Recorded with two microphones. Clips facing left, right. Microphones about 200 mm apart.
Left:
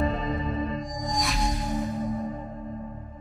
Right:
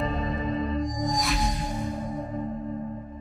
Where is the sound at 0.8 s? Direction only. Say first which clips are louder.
Right 3 dB; centre (ahead or behind).